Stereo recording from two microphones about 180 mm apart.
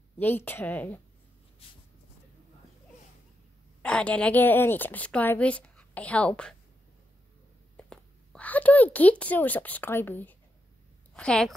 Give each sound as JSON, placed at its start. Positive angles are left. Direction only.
{"t": 0.2, "sound": "a woman's voice", "side_deg": 10}
{"t": 1.6, "sound": "speech", "side_deg": 30}
{"t": 3.8, "sound": "a woman's voice", "side_deg": 5}
{"t": 7.7, "sound": "a woman's voice", "side_deg": 5}